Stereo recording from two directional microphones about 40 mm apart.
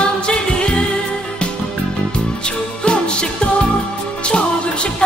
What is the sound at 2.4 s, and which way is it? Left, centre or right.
Music, left.